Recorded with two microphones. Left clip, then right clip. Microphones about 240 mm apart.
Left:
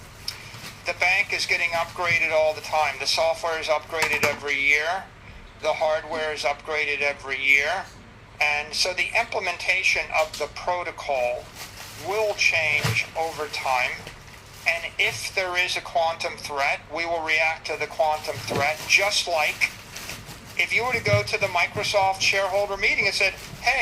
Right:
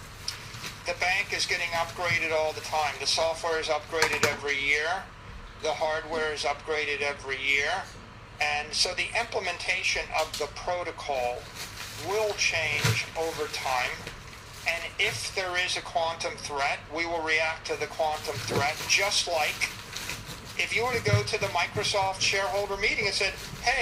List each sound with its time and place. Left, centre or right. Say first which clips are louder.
0.9 s a woman's voice: left 6 dB; left
12.4 s a woman's voice: left 6 dB; left
14.6 s a woman's voice: left 5 dB; left